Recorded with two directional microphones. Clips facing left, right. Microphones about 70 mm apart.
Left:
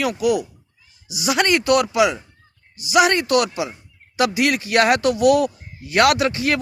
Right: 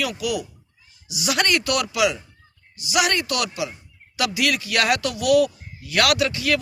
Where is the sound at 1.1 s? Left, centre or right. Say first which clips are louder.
Left 3 dB; left.